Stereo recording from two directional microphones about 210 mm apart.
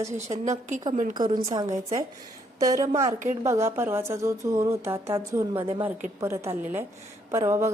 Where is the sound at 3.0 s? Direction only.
35° right (ahead or behind).